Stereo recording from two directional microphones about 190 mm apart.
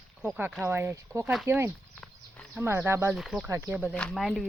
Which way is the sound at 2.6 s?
15° right (ahead or behind).